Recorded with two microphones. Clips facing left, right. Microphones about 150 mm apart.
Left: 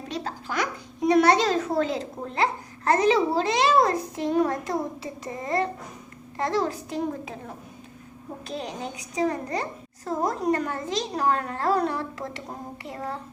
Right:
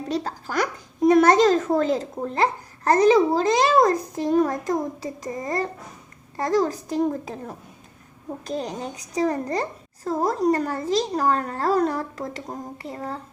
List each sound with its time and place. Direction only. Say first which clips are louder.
0.1 s a child's voice: right 4 dB; 40° right (ahead or behind)
8.4 s a child's voice: right 4 dB; 40° right (ahead or behind)